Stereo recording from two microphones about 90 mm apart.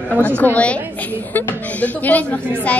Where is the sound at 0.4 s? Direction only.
15° left (ahead or behind).